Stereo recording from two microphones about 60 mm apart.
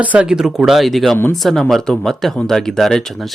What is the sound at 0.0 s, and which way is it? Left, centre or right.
Speech, right.